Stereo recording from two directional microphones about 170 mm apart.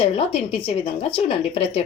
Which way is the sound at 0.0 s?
35° left (ahead or behind).